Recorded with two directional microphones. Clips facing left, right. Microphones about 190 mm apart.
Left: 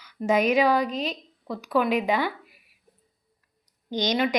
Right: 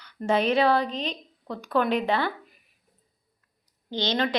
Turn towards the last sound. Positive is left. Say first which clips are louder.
# left 2 dB
turn(degrees=15)  # may be behind; listen again after turning